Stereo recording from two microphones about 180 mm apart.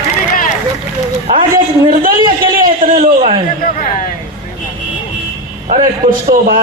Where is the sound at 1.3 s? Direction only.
25° right (ahead or behind).